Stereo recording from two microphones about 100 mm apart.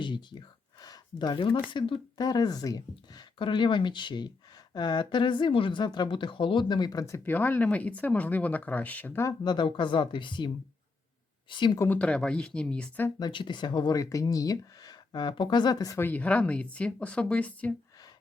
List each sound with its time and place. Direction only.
0.0 s a sound: 50° left (ahead or behind)
1.7 s speech: 50° left (ahead or behind)
3.3 s speech: 55° left (ahead or behind)
7.3 s speech: 20° left (ahead or behind)
9.2 s speech: 45° left (ahead or behind)
11.9 s speech: 10° left (ahead or behind)
13.1 s speech: 50° left (ahead or behind)
16.0 s speech: 15° left (ahead or behind)